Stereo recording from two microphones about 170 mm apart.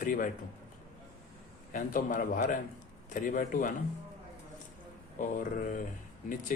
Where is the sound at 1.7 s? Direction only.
55° left (ahead or behind).